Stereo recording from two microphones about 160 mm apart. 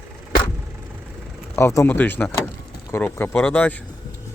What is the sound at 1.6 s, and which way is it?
Speech, 15° left (ahead or behind).